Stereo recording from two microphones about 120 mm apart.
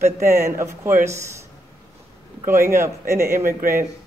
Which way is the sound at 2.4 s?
20° right (ahead or behind).